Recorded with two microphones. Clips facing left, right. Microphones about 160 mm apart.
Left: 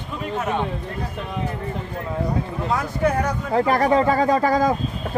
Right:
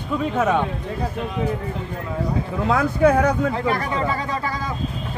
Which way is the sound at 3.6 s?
40° left (ahead or behind).